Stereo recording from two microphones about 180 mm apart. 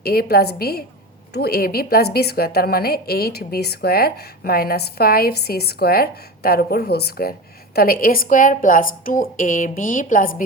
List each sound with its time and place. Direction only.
0.0 s a woman's voice: 55° left (ahead or behind)